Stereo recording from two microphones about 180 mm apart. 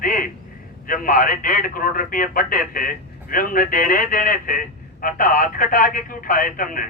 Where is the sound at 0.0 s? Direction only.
50° left (ahead or behind).